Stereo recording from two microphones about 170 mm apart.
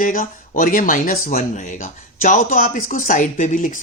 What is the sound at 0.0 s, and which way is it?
Speech, 55° left (ahead or behind).